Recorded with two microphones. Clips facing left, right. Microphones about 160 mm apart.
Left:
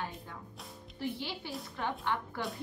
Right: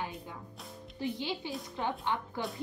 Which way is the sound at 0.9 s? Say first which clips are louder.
Right 3 dB; 15° right (ahead or behind).